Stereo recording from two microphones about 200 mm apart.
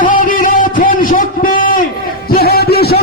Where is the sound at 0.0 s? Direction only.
40° left (ahead or behind).